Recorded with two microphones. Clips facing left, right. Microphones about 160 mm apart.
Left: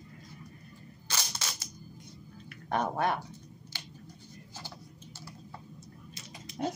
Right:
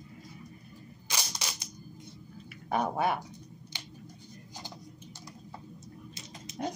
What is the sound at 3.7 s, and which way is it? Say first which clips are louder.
Scissors: even; 15° right (ahead or behind).